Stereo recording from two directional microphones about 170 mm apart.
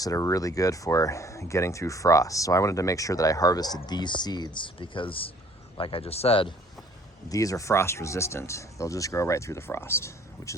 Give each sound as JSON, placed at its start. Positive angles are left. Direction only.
{"t": 0.0, "sound": "speech", "side_deg": 20}
{"t": 7.3, "sound": "speech", "side_deg": 20}